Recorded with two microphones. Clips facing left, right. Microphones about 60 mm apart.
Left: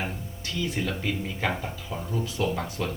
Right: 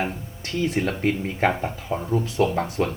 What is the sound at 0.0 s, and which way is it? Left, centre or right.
Speech, right.